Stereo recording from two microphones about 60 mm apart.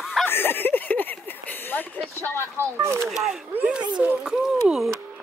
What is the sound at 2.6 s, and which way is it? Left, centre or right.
Speech, right.